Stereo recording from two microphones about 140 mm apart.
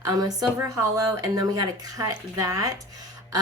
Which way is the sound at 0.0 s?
25° right (ahead or behind).